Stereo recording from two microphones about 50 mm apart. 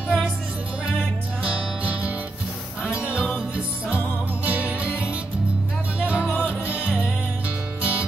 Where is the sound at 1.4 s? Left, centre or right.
Right.